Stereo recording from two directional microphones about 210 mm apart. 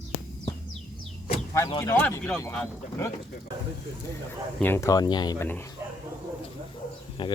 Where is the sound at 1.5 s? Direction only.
15° left (ahead or behind).